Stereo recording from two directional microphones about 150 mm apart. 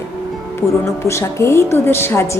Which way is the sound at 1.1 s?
20° left (ahead or behind).